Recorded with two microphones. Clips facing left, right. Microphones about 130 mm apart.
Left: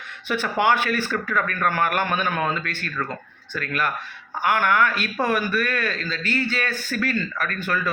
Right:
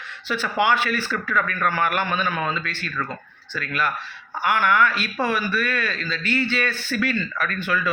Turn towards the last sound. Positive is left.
turn(degrees=45)  # may be behind; listen again after turning